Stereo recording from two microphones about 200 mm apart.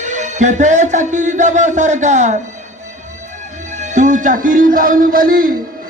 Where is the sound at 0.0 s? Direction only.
35° right (ahead or behind).